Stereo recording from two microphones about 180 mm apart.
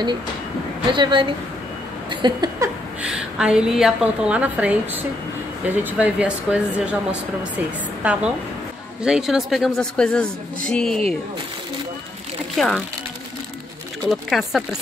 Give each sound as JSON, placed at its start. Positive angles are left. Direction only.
{"t": 0.9, "sound": "a sound", "side_deg": -25}
{"t": 3.0, "sound": "a woman's voice", "side_deg": -5}
{"t": 5.9, "sound": "a woman's voice", "side_deg": -5}
{"t": 12.5, "sound": "a woman's voice", "side_deg": 0}
{"t": 14.0, "sound": "a woman's voice", "side_deg": 0}